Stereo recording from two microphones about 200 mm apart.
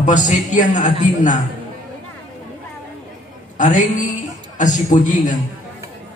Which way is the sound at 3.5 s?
40° left (ahead or behind).